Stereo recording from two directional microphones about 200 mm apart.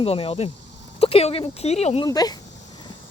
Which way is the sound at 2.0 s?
20° left (ahead or behind).